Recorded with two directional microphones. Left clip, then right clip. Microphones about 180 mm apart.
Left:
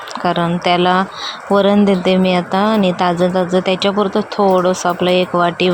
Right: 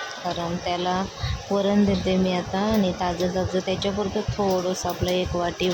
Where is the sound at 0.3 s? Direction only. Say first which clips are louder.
Left 13 dB; 25° left (ahead or behind).